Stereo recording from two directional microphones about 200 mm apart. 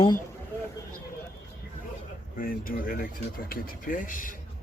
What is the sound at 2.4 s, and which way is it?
Speech, 45° left (ahead or behind).